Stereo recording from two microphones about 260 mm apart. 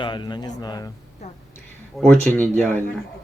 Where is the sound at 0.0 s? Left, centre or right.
Centre.